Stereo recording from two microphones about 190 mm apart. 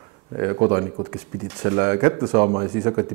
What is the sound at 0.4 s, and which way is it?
A man's voice, 25° right (ahead or behind).